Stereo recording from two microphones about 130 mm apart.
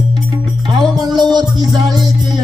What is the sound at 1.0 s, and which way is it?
Music, 30° right (ahead or behind).